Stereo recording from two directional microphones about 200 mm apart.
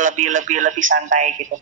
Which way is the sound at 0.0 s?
40° right (ahead or behind).